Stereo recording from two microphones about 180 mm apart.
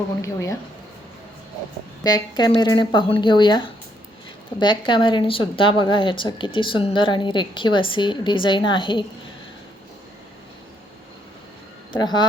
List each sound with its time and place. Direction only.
0.2 s speech: 15° left (ahead or behind)
2.0 s a woman's voice: 25° left (ahead or behind)
11.9 s a woman's voice: 25° left (ahead or behind)